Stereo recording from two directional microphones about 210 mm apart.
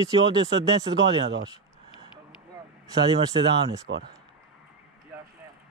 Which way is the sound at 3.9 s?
60° right (ahead or behind).